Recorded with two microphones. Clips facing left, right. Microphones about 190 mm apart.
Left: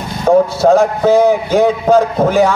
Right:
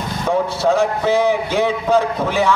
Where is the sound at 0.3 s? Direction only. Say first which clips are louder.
Left 8 dB; 40° left (ahead or behind).